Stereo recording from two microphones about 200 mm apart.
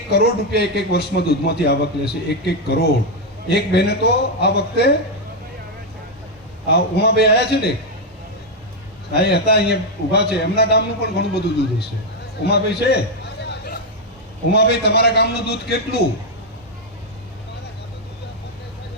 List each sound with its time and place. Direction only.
0.6 s a man's voice: 55° left (ahead or behind)
6.7 s a man's voice: 55° left (ahead or behind)
9.1 s a man's voice: 55° left (ahead or behind)
14.5 s a man's voice: 55° left (ahead or behind)